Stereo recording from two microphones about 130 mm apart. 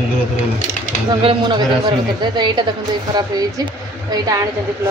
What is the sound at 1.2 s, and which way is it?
A woman's voice, 40° right (ahead or behind).